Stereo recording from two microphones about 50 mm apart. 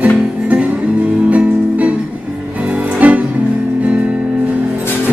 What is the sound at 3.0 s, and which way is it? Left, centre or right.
Music, right.